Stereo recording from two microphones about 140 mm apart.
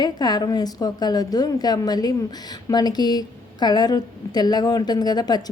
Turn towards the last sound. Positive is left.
turn(degrees=30)  # may be behind; listen again after turning